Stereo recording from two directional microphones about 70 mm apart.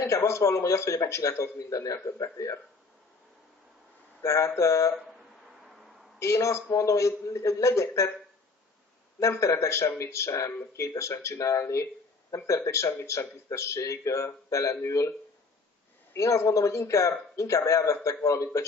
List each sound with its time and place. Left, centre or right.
0.0 s a man's voice: left
4.2 s a man's voice: left
6.1 s a man's voice: left
9.2 s a man's voice: left
16.2 s a man's voice: left